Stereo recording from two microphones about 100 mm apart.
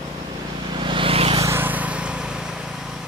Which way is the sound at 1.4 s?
20° right (ahead or behind).